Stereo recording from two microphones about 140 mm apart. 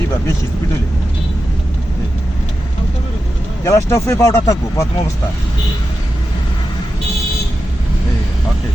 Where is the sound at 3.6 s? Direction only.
20° left (ahead or behind).